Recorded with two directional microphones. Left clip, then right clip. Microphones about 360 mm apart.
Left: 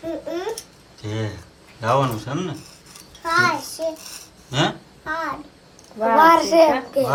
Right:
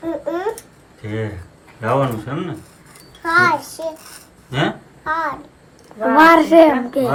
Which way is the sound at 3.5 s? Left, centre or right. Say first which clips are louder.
Right 4 dB; centre.